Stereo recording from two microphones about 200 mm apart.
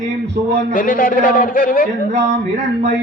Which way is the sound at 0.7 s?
45° left (ahead or behind).